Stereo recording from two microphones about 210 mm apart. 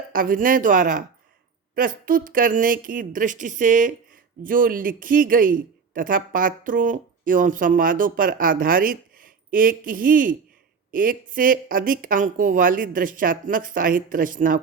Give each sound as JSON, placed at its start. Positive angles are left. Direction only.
{"t": 0.1, "sound": "speech", "side_deg": -40}